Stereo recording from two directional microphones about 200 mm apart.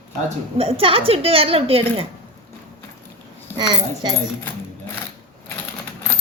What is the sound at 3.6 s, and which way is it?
Speech, 20° right (ahead or behind).